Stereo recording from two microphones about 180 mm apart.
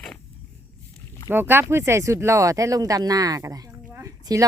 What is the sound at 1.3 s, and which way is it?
A woman's voice, 10° right (ahead or behind).